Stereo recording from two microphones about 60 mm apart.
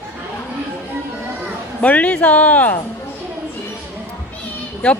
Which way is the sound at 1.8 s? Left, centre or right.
Left.